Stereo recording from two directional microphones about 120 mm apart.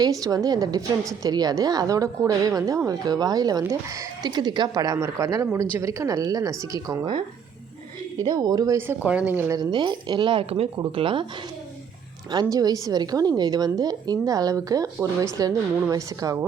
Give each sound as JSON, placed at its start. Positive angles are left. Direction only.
{"t": 0.0, "sound": "a woman's voice", "side_deg": -30}
{"t": 8.2, "sound": "a woman's voice", "side_deg": -35}
{"t": 9.0, "sound": "a woman's voice", "side_deg": -10}
{"t": 9.6, "sound": "a woman's voice", "side_deg": -40}
{"t": 12.3, "sound": "a woman's voice", "side_deg": -35}